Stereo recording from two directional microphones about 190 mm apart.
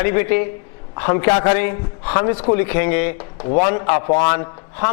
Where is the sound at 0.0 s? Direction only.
15° left (ahead or behind).